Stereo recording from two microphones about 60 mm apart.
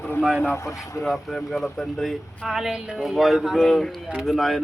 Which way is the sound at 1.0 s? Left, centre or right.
Centre.